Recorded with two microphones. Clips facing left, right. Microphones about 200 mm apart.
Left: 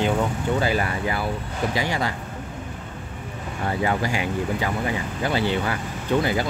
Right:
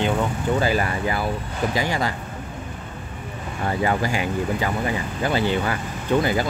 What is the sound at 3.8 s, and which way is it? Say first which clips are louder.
Speech: right 1 dB; 45° right (ahead or behind).